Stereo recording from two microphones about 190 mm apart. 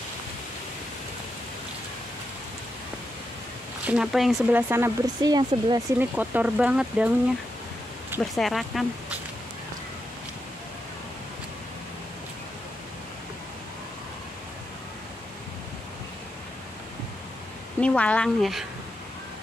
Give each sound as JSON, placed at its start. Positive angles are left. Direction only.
{"t": 3.8, "sound": "speech", "side_deg": -5}
{"t": 5.9, "sound": "speech", "side_deg": -10}
{"t": 8.2, "sound": "speech", "side_deg": 0}
{"t": 17.7, "sound": "speech", "side_deg": 5}